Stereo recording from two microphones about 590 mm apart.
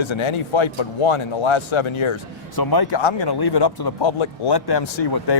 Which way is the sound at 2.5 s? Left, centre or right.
Left.